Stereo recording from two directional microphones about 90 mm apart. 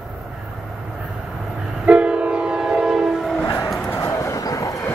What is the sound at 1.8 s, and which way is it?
Train, 10° right (ahead or behind).